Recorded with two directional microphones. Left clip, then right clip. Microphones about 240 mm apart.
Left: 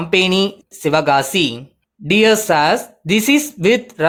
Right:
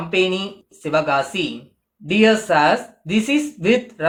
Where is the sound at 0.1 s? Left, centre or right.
Left.